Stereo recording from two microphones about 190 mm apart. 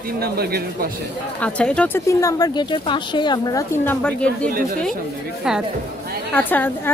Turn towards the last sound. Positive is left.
turn(degrees=10)  # may be behind; listen again after turning